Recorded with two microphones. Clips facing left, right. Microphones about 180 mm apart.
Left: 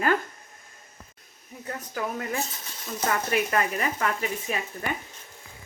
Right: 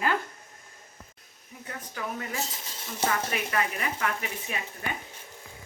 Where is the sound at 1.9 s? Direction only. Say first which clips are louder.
Left 4 dB; 45° left (ahead or behind).